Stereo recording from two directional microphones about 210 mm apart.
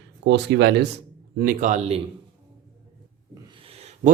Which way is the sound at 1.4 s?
40° right (ahead or behind).